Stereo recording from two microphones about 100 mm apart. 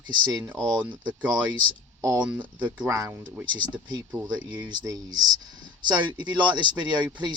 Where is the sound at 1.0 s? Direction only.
15° right (ahead or behind).